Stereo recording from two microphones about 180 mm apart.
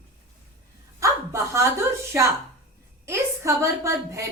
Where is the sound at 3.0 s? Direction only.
15° right (ahead or behind).